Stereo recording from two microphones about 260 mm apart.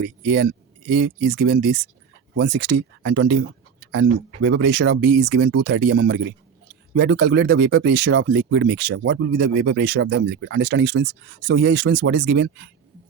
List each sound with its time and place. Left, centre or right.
0.0 s speech: right